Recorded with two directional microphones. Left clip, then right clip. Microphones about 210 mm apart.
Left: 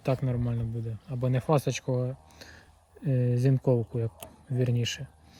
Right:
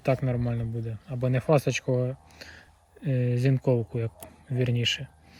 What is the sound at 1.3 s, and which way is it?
Speech, 35° right (ahead or behind).